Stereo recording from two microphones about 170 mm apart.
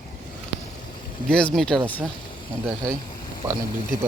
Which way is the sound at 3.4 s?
20° right (ahead or behind).